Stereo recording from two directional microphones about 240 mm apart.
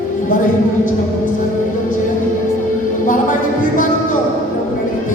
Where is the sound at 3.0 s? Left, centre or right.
Left.